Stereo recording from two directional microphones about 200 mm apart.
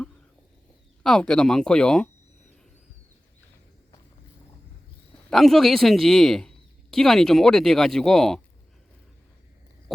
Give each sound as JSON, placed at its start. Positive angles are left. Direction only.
{"t": 1.0, "sound": "speech", "side_deg": 5}
{"t": 5.3, "sound": "speech", "side_deg": 0}